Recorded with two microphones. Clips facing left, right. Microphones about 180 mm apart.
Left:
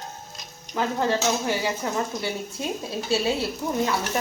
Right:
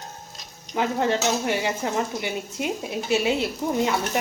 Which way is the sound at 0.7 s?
20° right (ahead or behind).